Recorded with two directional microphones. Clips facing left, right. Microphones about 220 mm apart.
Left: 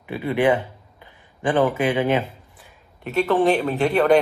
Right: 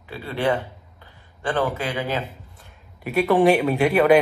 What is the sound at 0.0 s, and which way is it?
A man's voice, 20° left (ahead or behind).